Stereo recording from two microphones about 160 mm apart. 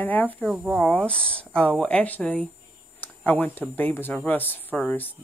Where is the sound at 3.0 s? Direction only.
10° left (ahead or behind).